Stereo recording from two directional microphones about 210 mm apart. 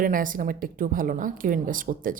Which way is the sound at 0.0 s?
40° right (ahead or behind).